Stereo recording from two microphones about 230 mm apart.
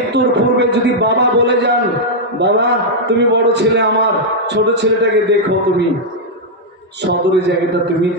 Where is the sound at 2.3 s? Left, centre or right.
Right.